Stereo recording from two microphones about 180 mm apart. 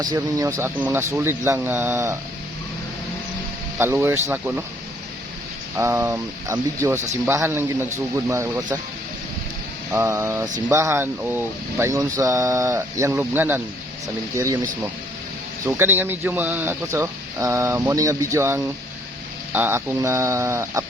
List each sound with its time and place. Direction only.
0.0 s speech: 20° right (ahead or behind)
3.8 s speech: 10° right (ahead or behind)
5.7 s speech: 15° right (ahead or behind)
9.9 s speech: 15° right (ahead or behind)
15.6 s speech: 10° right (ahead or behind)